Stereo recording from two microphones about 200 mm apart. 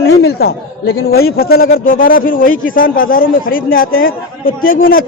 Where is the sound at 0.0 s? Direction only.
55° left (ahead or behind).